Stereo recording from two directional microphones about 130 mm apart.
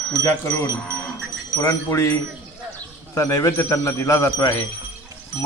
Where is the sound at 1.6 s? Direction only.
25° left (ahead or behind).